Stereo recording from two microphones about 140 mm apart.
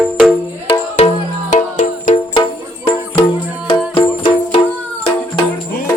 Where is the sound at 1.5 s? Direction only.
65° left (ahead or behind).